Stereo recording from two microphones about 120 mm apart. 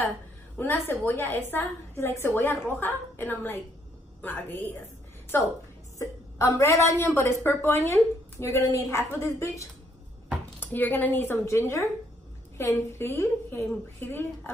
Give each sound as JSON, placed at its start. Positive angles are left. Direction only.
{"t": 0.6, "sound": "a woman's voice", "side_deg": 15}
{"t": 5.9, "sound": "a woman's voice", "side_deg": 25}